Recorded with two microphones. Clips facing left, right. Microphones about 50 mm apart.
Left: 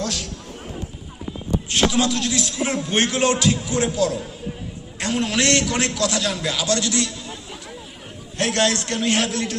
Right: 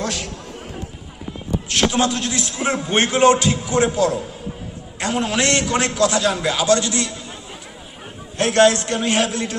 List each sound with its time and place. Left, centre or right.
0.0 s a sound: right
1.9 s a man's voice: right
4.9 s a man's voice: centre
8.4 s a man's voice: right